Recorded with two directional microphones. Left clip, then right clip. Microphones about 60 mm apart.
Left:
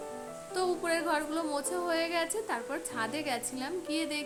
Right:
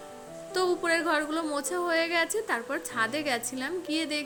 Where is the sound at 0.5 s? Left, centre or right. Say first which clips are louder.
Right 4 dB; right.